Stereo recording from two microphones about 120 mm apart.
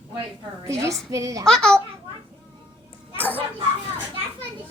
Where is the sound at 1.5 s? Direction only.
5° left (ahead or behind).